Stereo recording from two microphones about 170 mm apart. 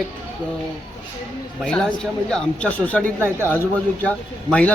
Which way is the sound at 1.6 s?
5° left (ahead or behind).